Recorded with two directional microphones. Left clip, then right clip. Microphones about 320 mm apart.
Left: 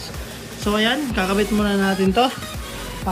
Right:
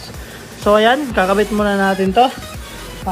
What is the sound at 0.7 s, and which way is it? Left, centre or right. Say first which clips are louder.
Speech: right 8 dB; centre.